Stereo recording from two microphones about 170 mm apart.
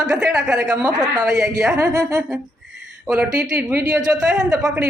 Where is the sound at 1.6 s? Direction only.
15° right (ahead or behind).